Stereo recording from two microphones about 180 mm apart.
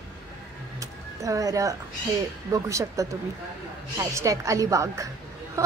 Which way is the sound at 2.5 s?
20° right (ahead or behind).